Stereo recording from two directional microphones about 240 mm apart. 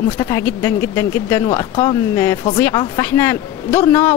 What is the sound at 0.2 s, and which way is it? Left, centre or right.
Speech, centre.